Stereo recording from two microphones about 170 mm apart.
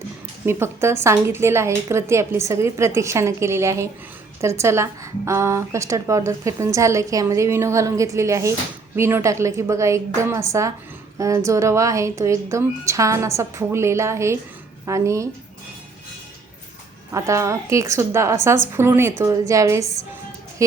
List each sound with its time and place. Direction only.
0.4 s a woman's voice: 15° right (ahead or behind)
17.1 s a woman's voice: 20° right (ahead or behind)